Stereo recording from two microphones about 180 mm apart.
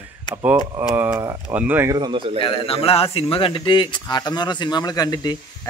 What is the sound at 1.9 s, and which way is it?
Speech, 25° right (ahead or behind).